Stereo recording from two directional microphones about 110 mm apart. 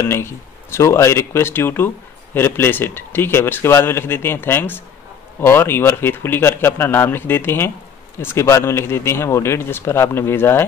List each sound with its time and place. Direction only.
0.0 s speech: 25° left (ahead or behind)